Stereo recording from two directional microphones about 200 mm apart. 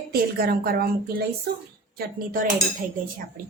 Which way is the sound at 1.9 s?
45° right (ahead or behind).